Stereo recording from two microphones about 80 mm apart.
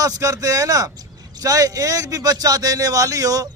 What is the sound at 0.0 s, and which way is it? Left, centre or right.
A man's voice, right.